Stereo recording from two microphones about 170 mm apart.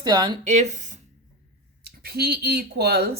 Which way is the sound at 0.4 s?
40° right (ahead or behind).